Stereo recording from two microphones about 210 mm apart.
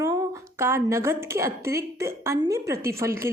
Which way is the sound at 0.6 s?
10° right (ahead or behind).